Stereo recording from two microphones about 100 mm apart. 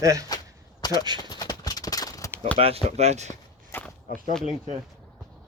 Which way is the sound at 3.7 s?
15° left (ahead or behind).